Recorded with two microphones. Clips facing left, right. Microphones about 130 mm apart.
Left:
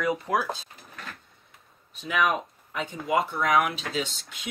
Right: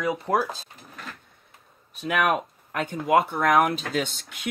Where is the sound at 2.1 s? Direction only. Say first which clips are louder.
Right 2 dB; 60° right (ahead or behind).